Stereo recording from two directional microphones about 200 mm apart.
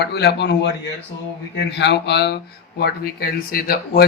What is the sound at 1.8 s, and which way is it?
Speech, 60° left (ahead or behind).